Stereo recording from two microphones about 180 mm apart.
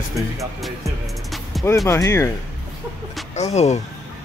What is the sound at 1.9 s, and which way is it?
Speech, 15° left (ahead or behind).